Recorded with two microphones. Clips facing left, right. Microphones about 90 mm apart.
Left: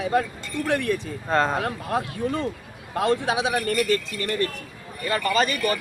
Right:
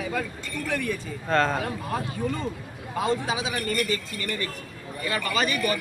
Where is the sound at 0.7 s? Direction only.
90° left.